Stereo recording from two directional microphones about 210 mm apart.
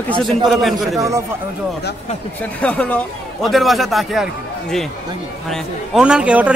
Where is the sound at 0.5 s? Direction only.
Centre (ahead or behind).